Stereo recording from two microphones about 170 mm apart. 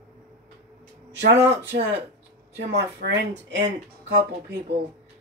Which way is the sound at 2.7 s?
85° right.